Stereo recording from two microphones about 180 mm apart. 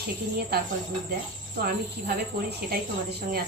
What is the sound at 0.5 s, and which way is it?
A woman's voice, 60° right (ahead or behind).